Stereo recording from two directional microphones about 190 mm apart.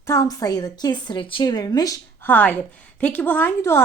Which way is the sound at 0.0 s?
15° left (ahead or behind).